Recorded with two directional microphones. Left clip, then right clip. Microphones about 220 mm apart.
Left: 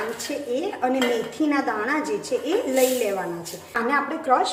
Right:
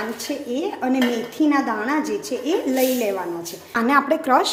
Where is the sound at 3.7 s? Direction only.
45° right (ahead or behind).